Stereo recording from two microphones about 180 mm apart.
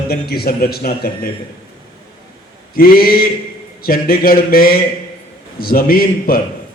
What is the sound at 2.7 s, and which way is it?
A man's voice, 55° left (ahead or behind).